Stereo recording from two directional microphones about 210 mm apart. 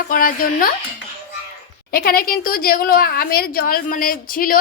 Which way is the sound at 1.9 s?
45° left (ahead or behind).